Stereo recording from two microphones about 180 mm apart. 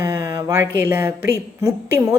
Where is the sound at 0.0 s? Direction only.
15° right (ahead or behind).